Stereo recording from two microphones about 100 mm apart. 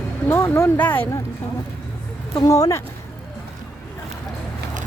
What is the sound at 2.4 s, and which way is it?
Speech, 35° left (ahead or behind).